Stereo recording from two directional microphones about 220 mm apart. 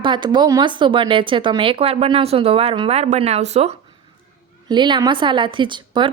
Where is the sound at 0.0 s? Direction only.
20° right (ahead or behind).